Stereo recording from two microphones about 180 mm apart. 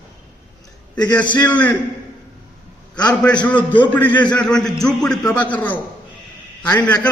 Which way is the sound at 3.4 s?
10° left (ahead or behind).